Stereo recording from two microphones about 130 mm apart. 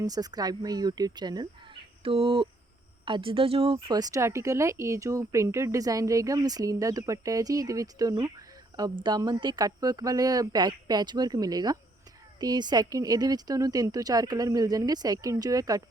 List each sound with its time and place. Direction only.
0.0 s speech: 30° right (ahead or behind)
2.0 s a sound: 45° right (ahead or behind)
3.1 s speech: 45° right (ahead or behind); by 15.8 s 25° right (ahead or behind)